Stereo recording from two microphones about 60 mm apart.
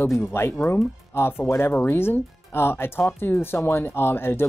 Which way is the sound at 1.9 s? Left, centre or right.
Left.